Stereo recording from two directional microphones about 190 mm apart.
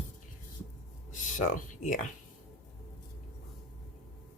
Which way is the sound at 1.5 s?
40° left (ahead or behind).